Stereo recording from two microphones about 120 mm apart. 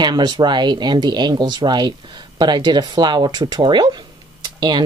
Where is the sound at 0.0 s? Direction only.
35° right (ahead or behind).